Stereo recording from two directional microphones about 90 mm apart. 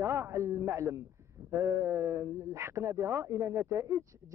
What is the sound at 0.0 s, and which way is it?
A man's voice, 30° right (ahead or behind).